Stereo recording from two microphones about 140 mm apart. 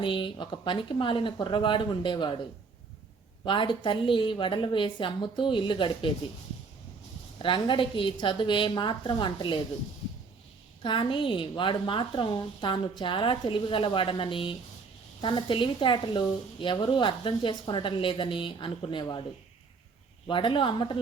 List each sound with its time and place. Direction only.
0.0 s a woman's voice: 35° left (ahead or behind)
3.4 s a woman's voice: 35° left (ahead or behind)
7.3 s a woman's voice: 35° left (ahead or behind)
10.8 s a woman's voice: 35° left (ahead or behind)
20.2 s a woman's voice: 35° left (ahead or behind)